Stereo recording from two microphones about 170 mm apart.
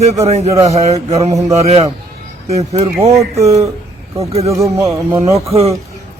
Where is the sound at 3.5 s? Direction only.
20° right (ahead or behind).